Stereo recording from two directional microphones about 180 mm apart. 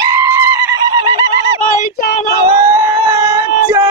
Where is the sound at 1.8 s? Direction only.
55° left (ahead or behind).